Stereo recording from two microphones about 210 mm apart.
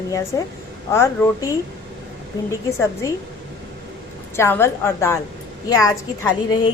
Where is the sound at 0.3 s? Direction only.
15° left (ahead or behind).